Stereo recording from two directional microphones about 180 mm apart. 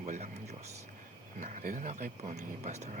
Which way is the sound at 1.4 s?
45° right (ahead or behind).